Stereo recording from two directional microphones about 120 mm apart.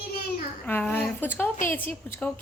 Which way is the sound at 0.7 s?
15° left (ahead or behind).